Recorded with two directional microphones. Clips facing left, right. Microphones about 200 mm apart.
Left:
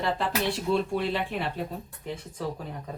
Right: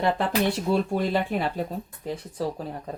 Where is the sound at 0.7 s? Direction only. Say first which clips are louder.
Right 2 dB; 40° right (ahead or behind).